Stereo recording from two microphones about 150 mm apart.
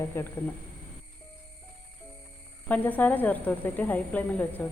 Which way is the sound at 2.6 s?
10° left (ahead or behind).